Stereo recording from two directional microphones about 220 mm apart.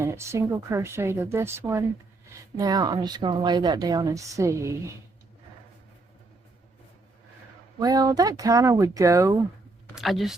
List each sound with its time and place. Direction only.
0.0 s speech: 10° right (ahead or behind)
7.8 s speech: 15° right (ahead or behind)
9.9 s speech: centre (ahead or behind)